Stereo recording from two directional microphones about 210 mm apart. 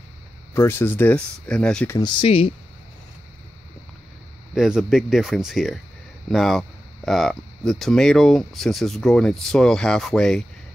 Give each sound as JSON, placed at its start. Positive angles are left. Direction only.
{"t": 0.6, "sound": "speech", "side_deg": 10}
{"t": 2.0, "sound": "speech", "side_deg": 20}
{"t": 4.6, "sound": "speech", "side_deg": 0}